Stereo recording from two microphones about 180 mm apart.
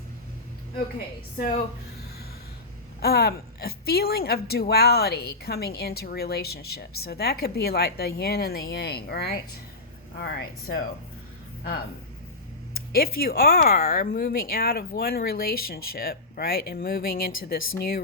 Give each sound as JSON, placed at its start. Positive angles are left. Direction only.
{"t": 1.4, "sound": "a woman's voice", "side_deg": 55}
{"t": 3.0, "sound": "a woman's voice", "side_deg": 60}
{"t": 12.9, "sound": "a woman's voice", "side_deg": 55}